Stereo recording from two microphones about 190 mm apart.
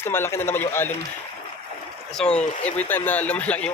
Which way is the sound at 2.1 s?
5° left (ahead or behind).